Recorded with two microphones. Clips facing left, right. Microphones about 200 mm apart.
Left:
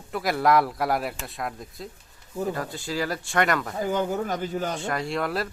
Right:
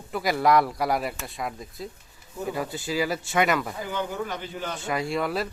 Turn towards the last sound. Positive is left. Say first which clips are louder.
# right 1 dB
turn(degrees=0)  # may be behind; listen again after turning